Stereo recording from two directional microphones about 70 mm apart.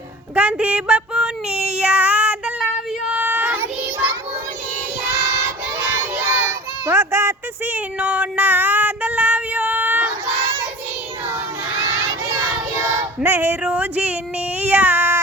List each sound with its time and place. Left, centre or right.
0.3 s child singing: centre
5.1 s child singing: right
11.8 s child singing: right
13.2 s a sound: right
13.6 s a sound: centre
14.6 s child singing: right